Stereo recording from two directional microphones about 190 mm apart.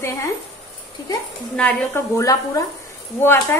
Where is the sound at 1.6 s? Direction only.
5° left (ahead or behind).